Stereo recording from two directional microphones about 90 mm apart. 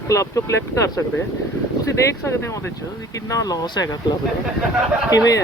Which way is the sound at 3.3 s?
40° left (ahead or behind).